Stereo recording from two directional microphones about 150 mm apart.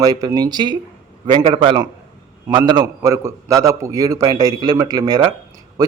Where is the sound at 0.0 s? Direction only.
25° right (ahead or behind).